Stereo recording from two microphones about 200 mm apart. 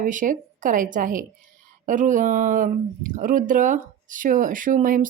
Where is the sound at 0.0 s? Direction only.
40° right (ahead or behind).